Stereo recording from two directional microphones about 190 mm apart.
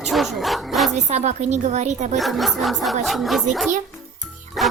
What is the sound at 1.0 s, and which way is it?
A woman's voice, 35° right (ahead or behind).